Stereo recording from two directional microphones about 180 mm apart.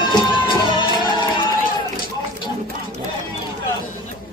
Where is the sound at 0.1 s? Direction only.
25° left (ahead or behind).